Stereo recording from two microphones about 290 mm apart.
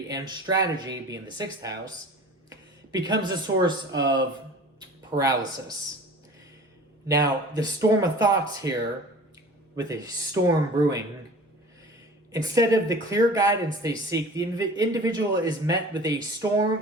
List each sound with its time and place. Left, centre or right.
0.1 s speech: centre
7.1 s speech: centre
9.7 s speech: centre
12.3 s speech: centre